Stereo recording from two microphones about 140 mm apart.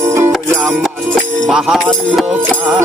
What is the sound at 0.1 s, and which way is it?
Music, 20° right (ahead or behind).